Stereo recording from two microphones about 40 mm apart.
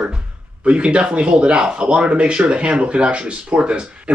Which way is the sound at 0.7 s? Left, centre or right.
Right.